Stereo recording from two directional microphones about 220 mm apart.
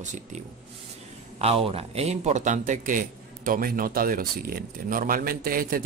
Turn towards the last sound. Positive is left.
turn(degrees=-40)  # may be behind; listen again after turning